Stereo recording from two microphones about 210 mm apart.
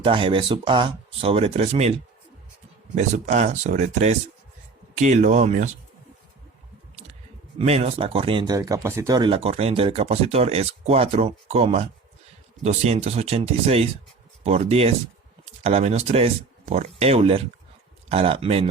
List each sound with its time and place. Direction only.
0.0 s speech: 25° right (ahead or behind)
2.9 s speech: 35° right (ahead or behind)
7.6 s speech: 30° right (ahead or behind)